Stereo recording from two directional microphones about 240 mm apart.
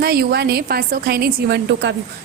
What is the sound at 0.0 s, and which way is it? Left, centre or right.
A woman's voice, right.